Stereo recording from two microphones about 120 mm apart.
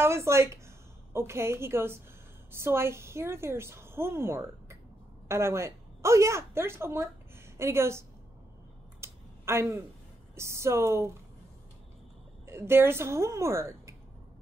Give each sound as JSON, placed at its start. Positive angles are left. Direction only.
{"t": 0.0, "sound": "a woman's voice", "side_deg": -20}
{"t": 9.0, "sound": "a sound", "side_deg": -20}
{"t": 10.3, "sound": "a woman's voice", "side_deg": -25}
{"t": 12.4, "sound": "a woman's voice", "side_deg": -20}